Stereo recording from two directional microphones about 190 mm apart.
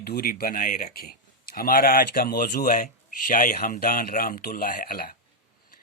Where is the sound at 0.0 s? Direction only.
55° left (ahead or behind).